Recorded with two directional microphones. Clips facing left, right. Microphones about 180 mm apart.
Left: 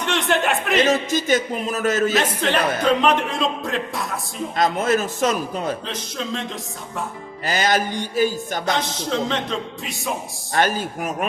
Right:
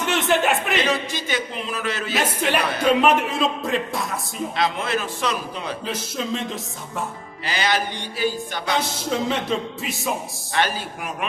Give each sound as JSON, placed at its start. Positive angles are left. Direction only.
{"t": 0.0, "sound": "speech", "side_deg": -5}
{"t": 0.8, "sound": "speech", "side_deg": 45}
{"t": 2.1, "sound": "speech", "side_deg": -10}
{"t": 4.5, "sound": "speech", "side_deg": 45}
{"t": 5.8, "sound": "speech", "side_deg": -5}
{"t": 7.4, "sound": "speech", "side_deg": 45}
{"t": 9.0, "sound": "speech", "side_deg": -5}
{"t": 10.5, "sound": "speech", "side_deg": 45}